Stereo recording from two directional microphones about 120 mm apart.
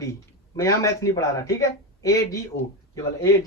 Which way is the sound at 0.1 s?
25° left (ahead or behind).